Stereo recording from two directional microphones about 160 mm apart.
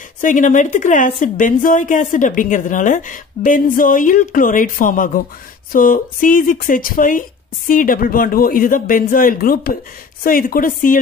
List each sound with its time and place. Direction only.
0.2 s speech: 55° left (ahead or behind)